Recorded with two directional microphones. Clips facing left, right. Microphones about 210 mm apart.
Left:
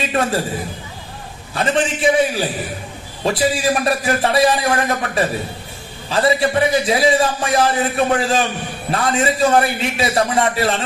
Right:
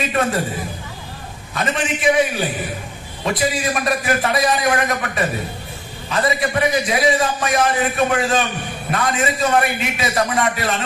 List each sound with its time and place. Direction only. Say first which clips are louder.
0.1 s a man's voice: left 1 dB; 30° left (ahead or behind)
1.5 s a man's voice: left 4 dB; 30° left (ahead or behind)